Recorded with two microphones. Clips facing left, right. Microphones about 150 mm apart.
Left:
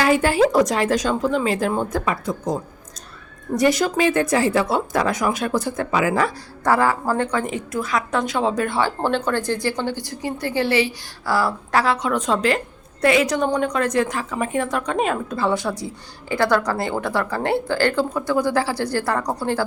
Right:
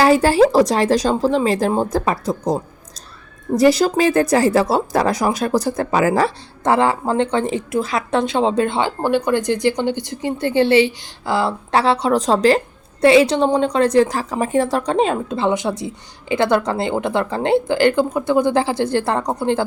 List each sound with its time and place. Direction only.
0.0 s speech: 35° right (ahead or behind)
9.0 s a woman's voice: 15° right (ahead or behind)